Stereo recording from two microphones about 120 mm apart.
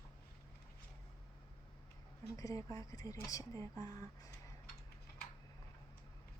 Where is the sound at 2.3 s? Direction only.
25° left (ahead or behind).